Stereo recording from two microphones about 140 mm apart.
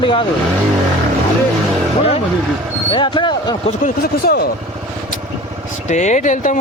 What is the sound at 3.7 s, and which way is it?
Speech, 75° left (ahead or behind).